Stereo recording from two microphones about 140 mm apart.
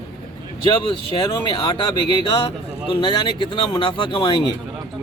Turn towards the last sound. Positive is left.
turn(degrees=35)  # may be behind; listen again after turning